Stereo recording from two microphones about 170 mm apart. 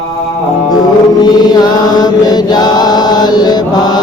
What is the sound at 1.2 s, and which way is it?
Mantra, 25° left (ahead or behind).